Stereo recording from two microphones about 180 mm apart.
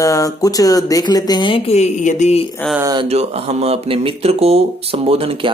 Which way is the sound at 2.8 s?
20° right (ahead or behind).